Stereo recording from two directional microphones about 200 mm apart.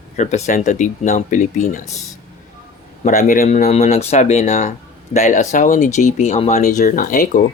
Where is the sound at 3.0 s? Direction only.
35° left (ahead or behind).